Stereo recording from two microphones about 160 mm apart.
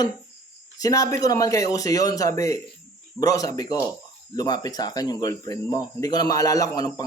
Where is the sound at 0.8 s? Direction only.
20° left (ahead or behind).